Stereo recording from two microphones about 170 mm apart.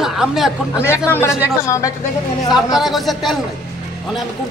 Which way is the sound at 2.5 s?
Centre (ahead or behind).